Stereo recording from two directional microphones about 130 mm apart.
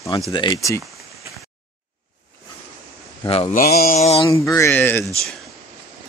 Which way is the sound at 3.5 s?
90° left.